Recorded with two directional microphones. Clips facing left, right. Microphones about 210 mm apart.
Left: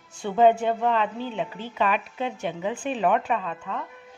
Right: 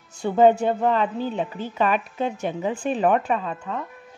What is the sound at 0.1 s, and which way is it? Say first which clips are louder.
A woman's voice: right 2 dB; 40° right (ahead or behind).